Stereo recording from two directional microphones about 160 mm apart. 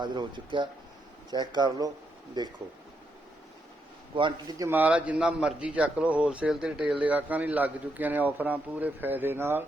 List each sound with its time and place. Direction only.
0.0 s speech: 30° right (ahead or behind)
4.1 s a man's voice: 30° right (ahead or behind); by 9.6 s 15° right (ahead or behind)